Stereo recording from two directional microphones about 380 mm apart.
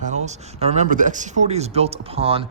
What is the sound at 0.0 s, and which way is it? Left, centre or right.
Speech, centre.